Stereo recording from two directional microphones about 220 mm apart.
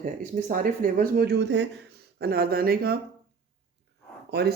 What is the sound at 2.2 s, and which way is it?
Speech, 45° right (ahead or behind).